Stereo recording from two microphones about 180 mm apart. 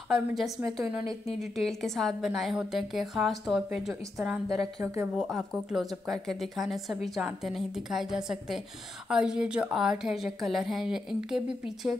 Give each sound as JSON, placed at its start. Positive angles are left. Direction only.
{"t": 0.1, "sound": "speech", "side_deg": 0}
{"t": 1.7, "sound": "speech", "side_deg": 0}